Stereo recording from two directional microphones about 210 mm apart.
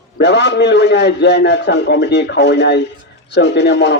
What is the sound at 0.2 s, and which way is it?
A man's voice, 55° left (ahead or behind).